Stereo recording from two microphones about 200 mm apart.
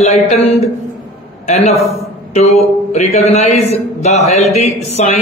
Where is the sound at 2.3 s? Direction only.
35° left (ahead or behind).